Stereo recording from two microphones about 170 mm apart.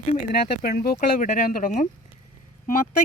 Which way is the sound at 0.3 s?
60° left (ahead or behind).